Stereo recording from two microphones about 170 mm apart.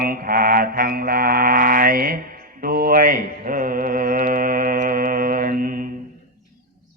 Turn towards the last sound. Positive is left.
turn(degrees=-55)  # may be behind; listen again after turning